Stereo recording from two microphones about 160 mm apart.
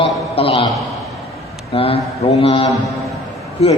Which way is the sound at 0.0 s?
35° left (ahead or behind).